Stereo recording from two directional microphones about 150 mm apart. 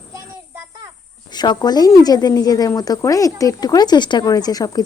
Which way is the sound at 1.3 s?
30° left (ahead or behind).